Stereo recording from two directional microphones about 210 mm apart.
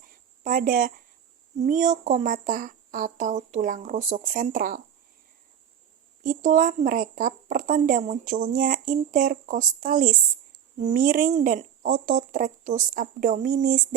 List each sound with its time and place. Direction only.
0.0 s a sound: 40° right (ahead or behind)
1.6 s a woman's voice: 35° right (ahead or behind)
6.2 s a woman's voice: 40° right (ahead or behind)